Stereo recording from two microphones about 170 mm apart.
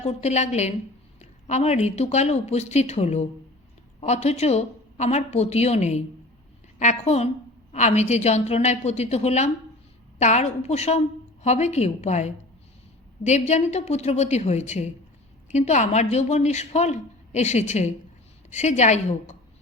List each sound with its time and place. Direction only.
0.0 s a woman's voice: 40° left (ahead or behind)